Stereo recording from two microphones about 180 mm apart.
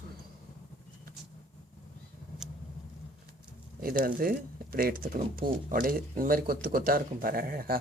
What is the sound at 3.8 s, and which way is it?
Speech, 55° right (ahead or behind).